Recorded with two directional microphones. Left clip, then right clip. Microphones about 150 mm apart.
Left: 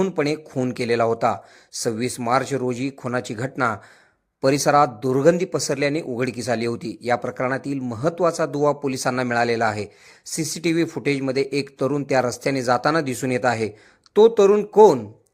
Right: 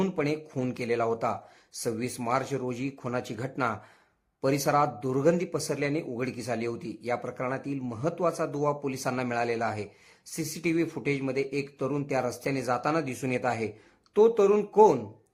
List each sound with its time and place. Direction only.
0.2 s a man's voice: 20° left (ahead or behind)